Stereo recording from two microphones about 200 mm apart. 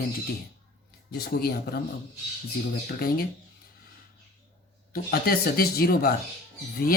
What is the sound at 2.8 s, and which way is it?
Speech, 50° left (ahead or behind).